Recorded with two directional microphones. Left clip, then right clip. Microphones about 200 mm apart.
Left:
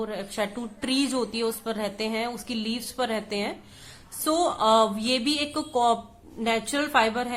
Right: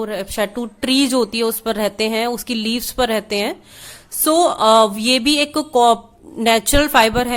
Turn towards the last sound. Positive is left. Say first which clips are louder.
# right 9 dB
turn(degrees=-45)  # may be behind; listen again after turning